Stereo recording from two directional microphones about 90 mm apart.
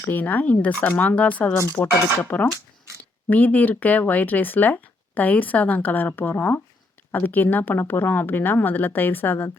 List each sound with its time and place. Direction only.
0.1 s speech: 20° left (ahead or behind)